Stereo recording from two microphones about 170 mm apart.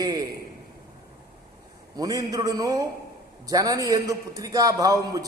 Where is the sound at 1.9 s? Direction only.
20° right (ahead or behind).